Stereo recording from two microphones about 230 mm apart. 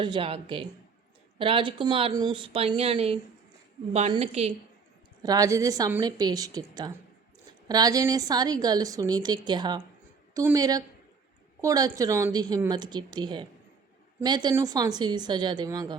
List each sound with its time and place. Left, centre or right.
0.0 s a woman's voice: right
5.2 s a woman's voice: centre
7.7 s a woman's voice: centre